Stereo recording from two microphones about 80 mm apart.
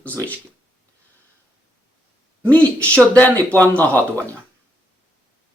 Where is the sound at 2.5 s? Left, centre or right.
Centre.